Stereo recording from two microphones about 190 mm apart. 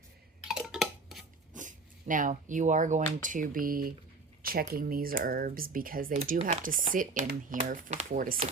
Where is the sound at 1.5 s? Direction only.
45° right (ahead or behind).